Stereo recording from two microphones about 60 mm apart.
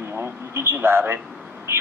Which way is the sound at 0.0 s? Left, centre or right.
Right.